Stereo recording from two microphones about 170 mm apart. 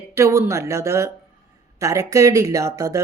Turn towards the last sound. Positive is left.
turn(degrees=-20)  # may be behind; listen again after turning